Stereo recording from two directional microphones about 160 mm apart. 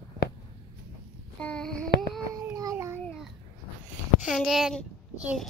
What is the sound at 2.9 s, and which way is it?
Babbling, 10° left (ahead or behind).